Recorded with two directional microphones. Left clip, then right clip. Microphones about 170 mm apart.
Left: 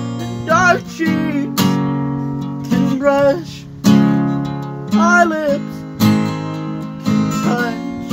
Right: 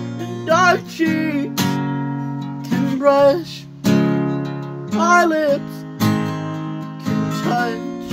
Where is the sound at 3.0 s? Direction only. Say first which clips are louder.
Right 1 dB; 5° right (ahead or behind).